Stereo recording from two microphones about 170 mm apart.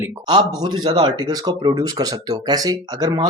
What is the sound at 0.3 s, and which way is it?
Speech, 25° right (ahead or behind).